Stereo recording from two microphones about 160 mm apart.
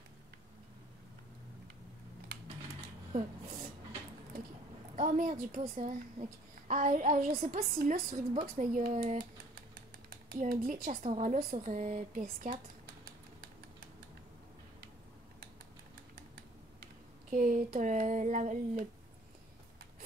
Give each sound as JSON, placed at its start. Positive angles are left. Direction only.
{"t": 4.9, "sound": "speech", "side_deg": -55}
{"t": 8.5, "sound": "speech", "side_deg": -55}
{"t": 10.3, "sound": "speech", "side_deg": -65}
{"t": 17.3, "sound": "speech", "side_deg": -55}